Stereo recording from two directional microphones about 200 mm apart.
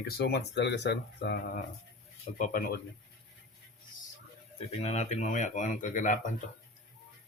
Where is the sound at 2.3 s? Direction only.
45° left (ahead or behind).